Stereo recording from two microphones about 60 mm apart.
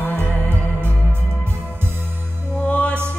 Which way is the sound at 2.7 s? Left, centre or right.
Left.